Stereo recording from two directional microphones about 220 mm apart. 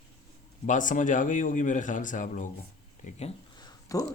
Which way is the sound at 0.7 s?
35° left (ahead or behind).